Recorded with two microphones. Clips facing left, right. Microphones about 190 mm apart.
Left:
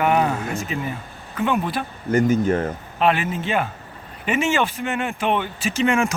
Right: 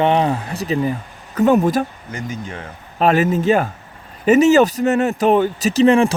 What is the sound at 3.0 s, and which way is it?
Speech, 40° right (ahead or behind).